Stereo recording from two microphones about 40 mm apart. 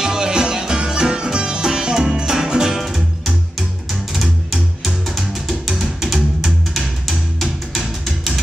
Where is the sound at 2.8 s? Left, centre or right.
Centre.